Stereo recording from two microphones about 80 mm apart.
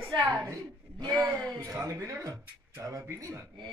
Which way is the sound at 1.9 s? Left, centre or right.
Right.